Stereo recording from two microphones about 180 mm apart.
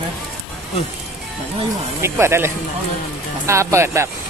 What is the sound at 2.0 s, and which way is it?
Speech, 15° right (ahead or behind).